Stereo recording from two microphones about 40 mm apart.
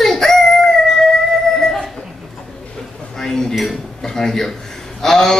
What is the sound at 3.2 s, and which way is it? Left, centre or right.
Dishes, centre.